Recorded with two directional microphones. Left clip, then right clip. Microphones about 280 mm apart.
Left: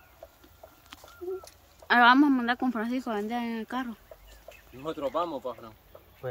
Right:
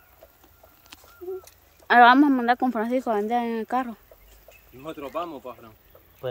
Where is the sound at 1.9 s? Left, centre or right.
Centre.